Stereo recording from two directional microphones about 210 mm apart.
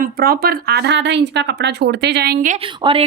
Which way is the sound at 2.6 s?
25° right (ahead or behind).